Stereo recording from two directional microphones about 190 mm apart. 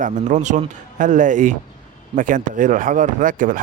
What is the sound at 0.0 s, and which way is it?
Speech, 40° right (ahead or behind).